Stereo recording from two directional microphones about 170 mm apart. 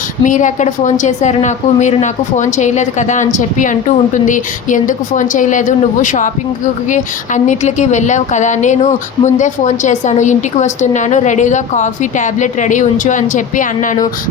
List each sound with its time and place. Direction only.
0.2 s a woman's voice: 45° left (ahead or behind)